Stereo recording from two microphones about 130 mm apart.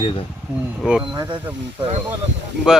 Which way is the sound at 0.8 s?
5° right (ahead or behind).